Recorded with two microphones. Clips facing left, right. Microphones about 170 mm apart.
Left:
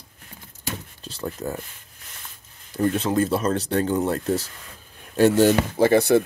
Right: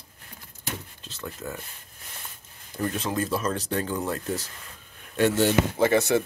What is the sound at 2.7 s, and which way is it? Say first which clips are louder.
Speech: left 7 dB; 30° left (ahead or behind).